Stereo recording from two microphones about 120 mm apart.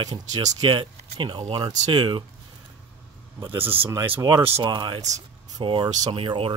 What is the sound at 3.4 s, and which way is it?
Speech, 15° right (ahead or behind).